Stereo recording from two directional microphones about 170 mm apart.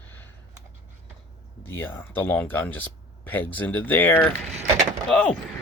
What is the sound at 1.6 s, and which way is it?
Speech, 10° left (ahead or behind).